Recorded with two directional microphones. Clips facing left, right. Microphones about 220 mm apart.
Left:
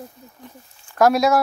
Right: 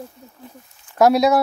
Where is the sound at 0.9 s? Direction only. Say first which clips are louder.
Right 2 dB; 20° right (ahead or behind).